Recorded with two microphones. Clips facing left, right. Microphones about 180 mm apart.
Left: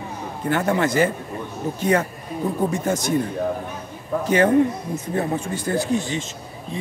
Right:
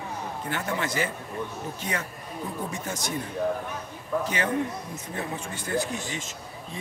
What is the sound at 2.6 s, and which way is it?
Speech, 50° left (ahead or behind).